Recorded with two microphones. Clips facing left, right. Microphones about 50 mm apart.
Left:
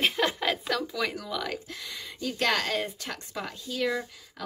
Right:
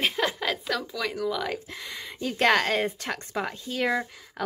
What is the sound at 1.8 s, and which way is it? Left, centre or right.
Speech, right.